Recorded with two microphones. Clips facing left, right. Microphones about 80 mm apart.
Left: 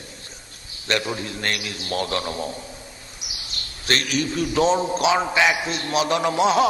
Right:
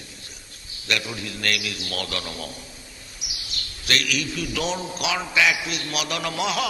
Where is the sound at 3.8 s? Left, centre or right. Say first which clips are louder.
Left 3 dB; left.